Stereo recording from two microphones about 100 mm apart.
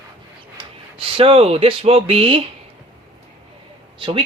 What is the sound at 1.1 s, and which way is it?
Speech, 65° right (ahead or behind).